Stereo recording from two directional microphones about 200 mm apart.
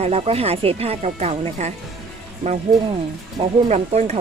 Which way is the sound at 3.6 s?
35° right (ahead or behind).